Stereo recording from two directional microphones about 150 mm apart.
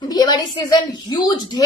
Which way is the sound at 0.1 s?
25° left (ahead or behind).